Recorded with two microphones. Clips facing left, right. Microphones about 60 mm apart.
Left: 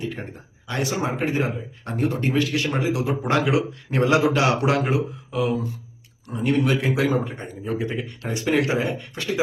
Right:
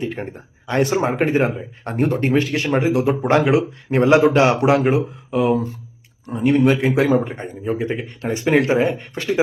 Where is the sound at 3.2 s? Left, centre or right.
Right.